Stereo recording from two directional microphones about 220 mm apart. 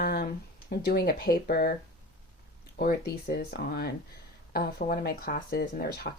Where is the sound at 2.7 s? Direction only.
45° left (ahead or behind).